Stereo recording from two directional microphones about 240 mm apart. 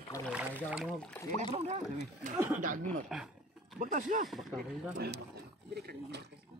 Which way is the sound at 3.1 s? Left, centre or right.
Centre.